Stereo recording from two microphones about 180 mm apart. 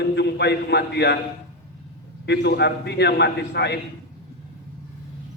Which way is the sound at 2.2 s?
70° left (ahead or behind).